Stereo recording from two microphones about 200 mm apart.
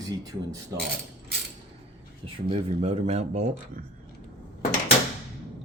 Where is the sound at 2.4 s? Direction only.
30° right (ahead or behind).